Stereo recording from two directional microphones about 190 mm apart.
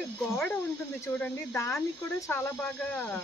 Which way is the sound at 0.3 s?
10° left (ahead or behind).